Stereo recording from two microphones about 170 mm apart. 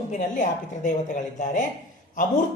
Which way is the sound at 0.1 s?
50° left (ahead or behind).